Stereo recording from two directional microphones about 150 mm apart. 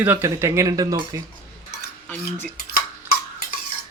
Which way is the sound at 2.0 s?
10° left (ahead or behind).